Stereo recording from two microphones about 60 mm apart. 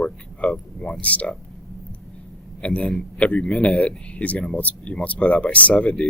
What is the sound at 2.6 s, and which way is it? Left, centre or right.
A man's voice, centre.